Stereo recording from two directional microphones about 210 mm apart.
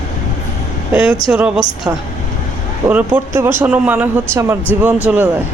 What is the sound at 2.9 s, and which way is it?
Speech, 5° right (ahead or behind).